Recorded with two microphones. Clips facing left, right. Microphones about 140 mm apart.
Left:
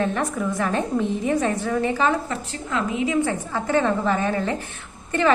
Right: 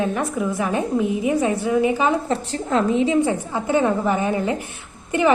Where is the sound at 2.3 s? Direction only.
35° right (ahead or behind).